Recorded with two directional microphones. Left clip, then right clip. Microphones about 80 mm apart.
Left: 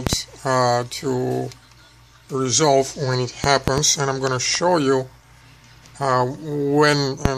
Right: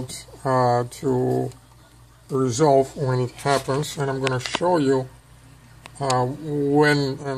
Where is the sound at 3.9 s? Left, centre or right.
Left.